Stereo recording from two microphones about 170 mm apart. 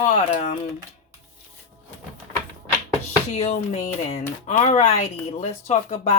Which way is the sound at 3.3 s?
40° left (ahead or behind).